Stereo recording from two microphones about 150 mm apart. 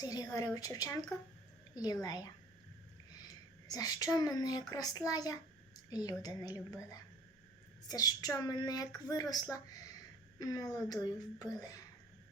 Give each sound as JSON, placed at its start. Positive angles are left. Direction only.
{"t": 0.0, "sound": "a child's voice", "side_deg": 25}
{"t": 3.7, "sound": "a child's voice", "side_deg": 25}
{"t": 10.3, "sound": "a child's voice", "side_deg": 25}